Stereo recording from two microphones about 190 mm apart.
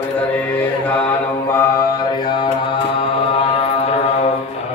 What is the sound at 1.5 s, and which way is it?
Mantra, 15° left (ahead or behind).